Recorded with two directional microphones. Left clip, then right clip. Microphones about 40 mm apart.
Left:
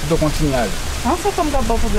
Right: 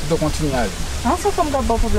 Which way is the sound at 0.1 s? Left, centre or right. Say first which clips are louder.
Left 2 dB; right.